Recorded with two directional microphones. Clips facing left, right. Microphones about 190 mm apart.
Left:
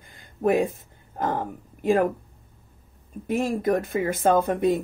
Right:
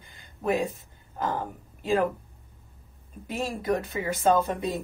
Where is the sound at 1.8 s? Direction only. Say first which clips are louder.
Left 4 dB; 50° left (ahead or behind).